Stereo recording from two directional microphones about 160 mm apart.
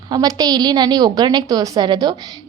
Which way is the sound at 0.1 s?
25° right (ahead or behind).